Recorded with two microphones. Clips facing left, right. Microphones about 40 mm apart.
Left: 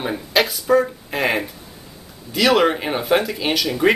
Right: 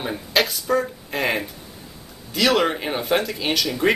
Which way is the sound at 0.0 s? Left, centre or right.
Centre.